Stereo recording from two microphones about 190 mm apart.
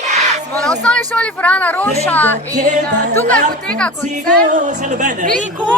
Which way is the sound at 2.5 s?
40° right (ahead or behind).